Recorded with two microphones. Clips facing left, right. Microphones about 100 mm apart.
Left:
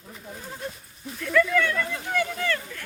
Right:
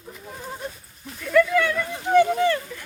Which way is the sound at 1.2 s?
10° right (ahead or behind).